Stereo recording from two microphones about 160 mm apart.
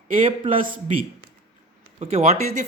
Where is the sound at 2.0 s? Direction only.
40° right (ahead or behind).